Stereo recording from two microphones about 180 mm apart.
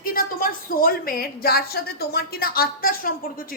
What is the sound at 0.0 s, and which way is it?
A man's voice, 55° left (ahead or behind).